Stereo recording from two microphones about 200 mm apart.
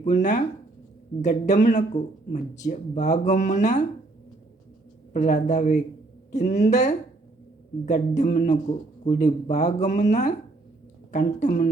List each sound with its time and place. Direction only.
0.0 s speech: 40° left (ahead or behind)
5.1 s speech: 35° left (ahead or behind)
11.3 s speech: 40° left (ahead or behind)